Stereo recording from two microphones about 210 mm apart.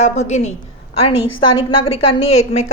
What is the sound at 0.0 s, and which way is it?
A woman's voice, 30° left (ahead or behind).